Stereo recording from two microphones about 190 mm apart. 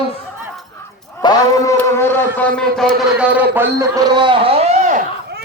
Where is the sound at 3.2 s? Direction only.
5° right (ahead or behind).